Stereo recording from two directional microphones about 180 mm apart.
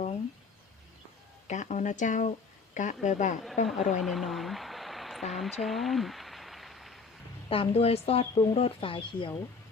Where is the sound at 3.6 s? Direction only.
Centre (ahead or behind).